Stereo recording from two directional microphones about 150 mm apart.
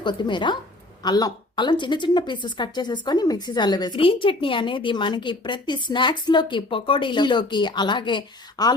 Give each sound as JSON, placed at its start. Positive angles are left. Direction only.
{"t": 0.0, "sound": "a woman's voice", "side_deg": 30}